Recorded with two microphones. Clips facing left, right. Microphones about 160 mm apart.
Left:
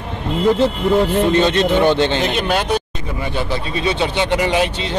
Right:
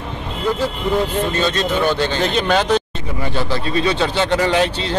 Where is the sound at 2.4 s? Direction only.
10° left (ahead or behind).